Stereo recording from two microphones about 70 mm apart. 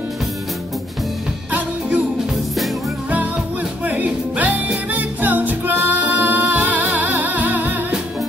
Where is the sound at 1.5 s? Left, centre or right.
Right.